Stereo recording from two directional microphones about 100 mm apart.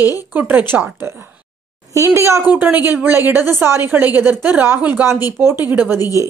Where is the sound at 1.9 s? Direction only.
30° right (ahead or behind).